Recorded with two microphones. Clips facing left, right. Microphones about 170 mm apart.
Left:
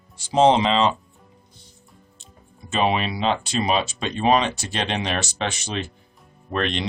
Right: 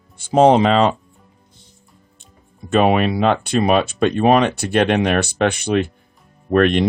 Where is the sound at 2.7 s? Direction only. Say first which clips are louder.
Right 7 dB; 55° right (ahead or behind).